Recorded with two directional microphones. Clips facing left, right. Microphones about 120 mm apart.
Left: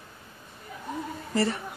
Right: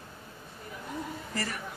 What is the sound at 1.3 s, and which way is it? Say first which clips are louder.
Speech: left 11 dB; 25° left (ahead or behind).